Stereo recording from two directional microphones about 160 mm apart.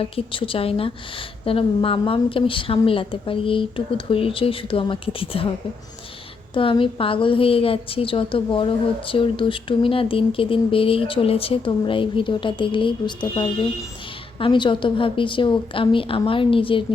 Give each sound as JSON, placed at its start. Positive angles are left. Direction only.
{"t": 0.0, "sound": "a woman's voice", "side_deg": 35}
{"t": 6.5, "sound": "a woman's voice", "side_deg": 35}